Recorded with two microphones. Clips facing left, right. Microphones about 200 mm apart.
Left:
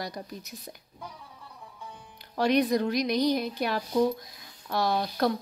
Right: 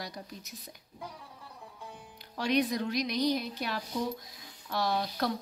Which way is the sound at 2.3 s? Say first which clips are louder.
Left 5 dB; 45° left (ahead or behind).